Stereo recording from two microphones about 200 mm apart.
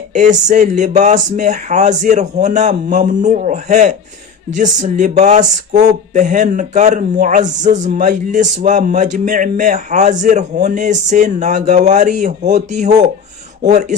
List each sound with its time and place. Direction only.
0.1 s speech: 35° right (ahead or behind)